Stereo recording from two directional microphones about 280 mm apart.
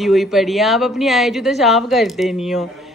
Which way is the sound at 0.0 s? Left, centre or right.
Centre.